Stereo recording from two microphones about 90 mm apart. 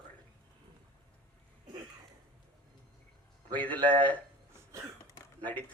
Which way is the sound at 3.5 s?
15° left (ahead or behind).